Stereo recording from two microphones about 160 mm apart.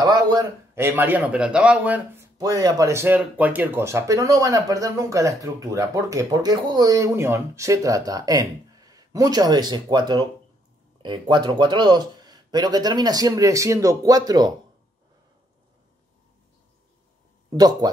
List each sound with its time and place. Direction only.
0.0 s speech: 25° right (ahead or behind)
0.8 s a man's voice: 10° right (ahead or behind)
2.3 s speech: 25° right (ahead or behind)
17.5 s speech: 25° right (ahead or behind)